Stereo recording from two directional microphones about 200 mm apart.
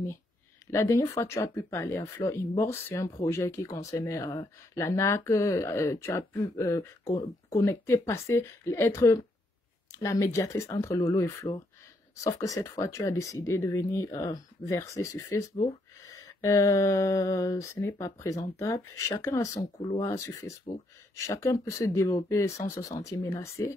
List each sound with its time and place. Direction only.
0.7 s speech: 15° left (ahead or behind)